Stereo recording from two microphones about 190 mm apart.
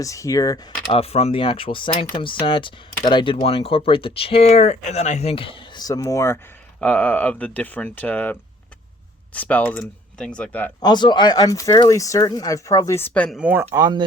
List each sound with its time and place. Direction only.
0.0 s speech: 15° left (ahead or behind)
0.9 s speech: 30° left (ahead or behind); by 10.7 s 5° left (ahead or behind)
10.8 s speech: 20° left (ahead or behind); by 13.4 s 5° left (ahead or behind)
13.4 s speech: 10° right (ahead or behind)